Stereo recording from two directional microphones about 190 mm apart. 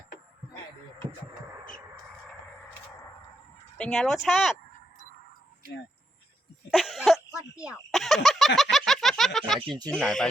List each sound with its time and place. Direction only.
3.8 s speech: 5° left (ahead or behind)
6.7 s cough: centre (ahead or behind)
7.6 s speech: 5° right (ahead or behind)
8.7 s a sound: centre (ahead or behind)
9.6 s speech: 25° right (ahead or behind)
9.9 s speech: 5° left (ahead or behind)